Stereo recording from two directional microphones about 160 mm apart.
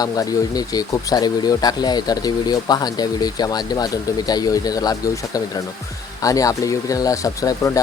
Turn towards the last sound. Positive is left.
turn(degrees=20)  # may be behind; listen again after turning